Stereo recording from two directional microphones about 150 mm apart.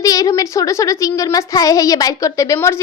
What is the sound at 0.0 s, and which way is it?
Speech, 25° left (ahead or behind).